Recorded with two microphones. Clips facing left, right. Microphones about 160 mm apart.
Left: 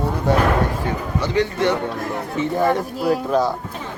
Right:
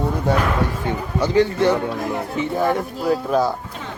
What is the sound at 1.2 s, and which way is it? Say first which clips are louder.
Speech: right 3 dB; 30° right (ahead or behind).